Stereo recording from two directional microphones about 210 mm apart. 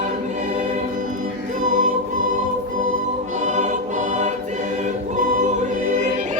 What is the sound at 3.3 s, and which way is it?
Choir, 35° right (ahead or behind).